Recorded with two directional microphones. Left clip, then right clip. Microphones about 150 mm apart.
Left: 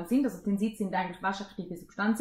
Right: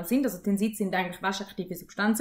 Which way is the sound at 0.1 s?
15° right (ahead or behind).